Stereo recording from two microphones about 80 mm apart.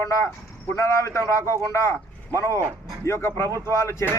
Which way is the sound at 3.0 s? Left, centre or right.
Left.